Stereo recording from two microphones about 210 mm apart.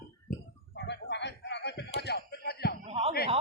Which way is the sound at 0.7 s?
55° left (ahead or behind).